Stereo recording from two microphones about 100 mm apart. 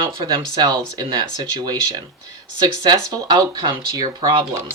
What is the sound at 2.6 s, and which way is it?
Speech, 45° right (ahead or behind).